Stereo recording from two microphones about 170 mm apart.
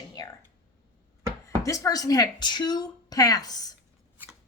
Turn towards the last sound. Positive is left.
turn(degrees=20)  # may be behind; listen again after turning